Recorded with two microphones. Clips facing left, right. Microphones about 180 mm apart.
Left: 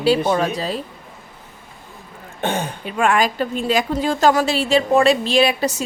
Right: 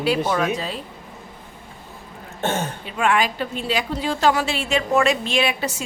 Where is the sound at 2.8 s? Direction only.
45° left (ahead or behind).